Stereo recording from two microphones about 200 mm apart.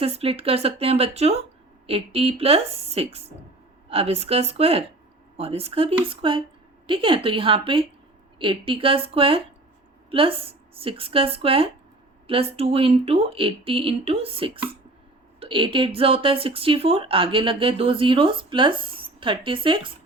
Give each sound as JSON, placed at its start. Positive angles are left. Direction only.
{"t": 0.0, "sound": "a woman's voice", "side_deg": -30}